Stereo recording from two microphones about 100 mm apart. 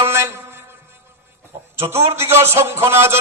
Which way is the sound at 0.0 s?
25° right (ahead or behind).